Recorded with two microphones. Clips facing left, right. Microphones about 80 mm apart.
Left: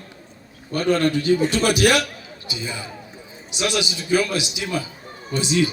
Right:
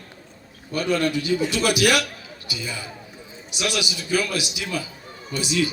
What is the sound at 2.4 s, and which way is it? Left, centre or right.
A man's voice, left.